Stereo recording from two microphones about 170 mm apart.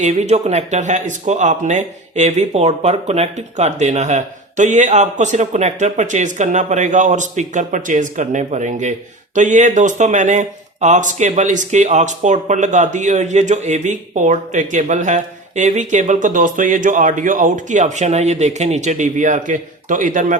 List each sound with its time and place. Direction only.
0.0 s speech: 40° right (ahead or behind)